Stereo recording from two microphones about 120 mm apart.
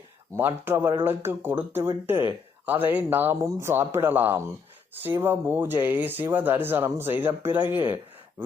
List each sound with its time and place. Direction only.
0.3 s speech: 20° right (ahead or behind)